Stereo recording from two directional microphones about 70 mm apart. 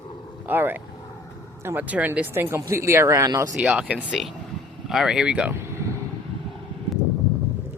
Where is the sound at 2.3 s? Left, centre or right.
Right.